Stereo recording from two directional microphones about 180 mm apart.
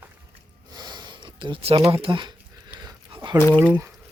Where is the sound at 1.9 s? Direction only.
30° right (ahead or behind).